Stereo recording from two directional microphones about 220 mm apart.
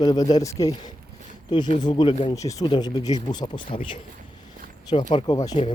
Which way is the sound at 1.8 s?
20° left (ahead or behind).